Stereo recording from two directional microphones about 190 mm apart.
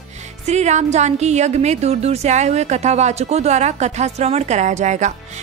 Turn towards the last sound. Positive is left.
turn(degrees=-40)  # may be behind; listen again after turning